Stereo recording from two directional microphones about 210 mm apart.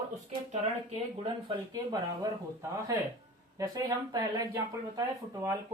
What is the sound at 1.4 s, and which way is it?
Speech, 20° right (ahead or behind).